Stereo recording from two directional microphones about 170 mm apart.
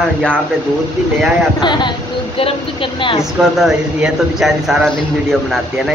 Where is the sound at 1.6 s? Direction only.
25° left (ahead or behind).